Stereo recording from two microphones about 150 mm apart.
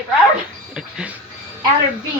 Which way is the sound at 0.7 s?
5° right (ahead or behind).